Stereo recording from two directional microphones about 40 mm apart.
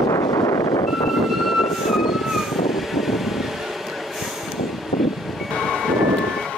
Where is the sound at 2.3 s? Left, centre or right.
Centre.